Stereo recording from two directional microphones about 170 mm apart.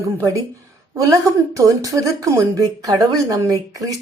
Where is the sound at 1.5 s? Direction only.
20° right (ahead or behind).